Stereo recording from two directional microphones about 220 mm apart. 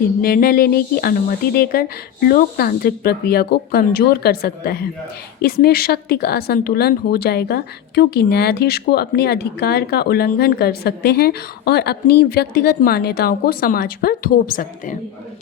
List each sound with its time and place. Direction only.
0.2 s a woman's voice: 40° left (ahead or behind)